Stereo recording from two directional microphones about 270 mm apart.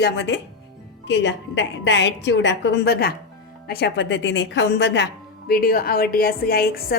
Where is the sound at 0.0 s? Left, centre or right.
Left.